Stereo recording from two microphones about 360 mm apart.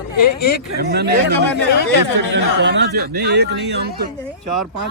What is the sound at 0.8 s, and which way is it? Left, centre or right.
Speech, right.